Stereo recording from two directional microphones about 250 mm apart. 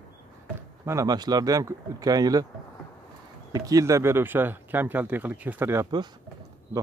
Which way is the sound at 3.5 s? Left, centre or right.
Centre.